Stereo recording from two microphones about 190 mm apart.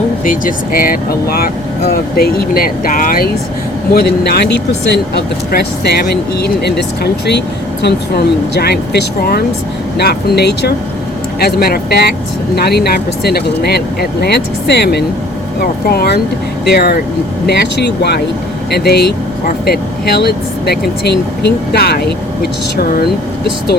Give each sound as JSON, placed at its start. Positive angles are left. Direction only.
{"t": 0.3, "sound": "speech", "side_deg": 45}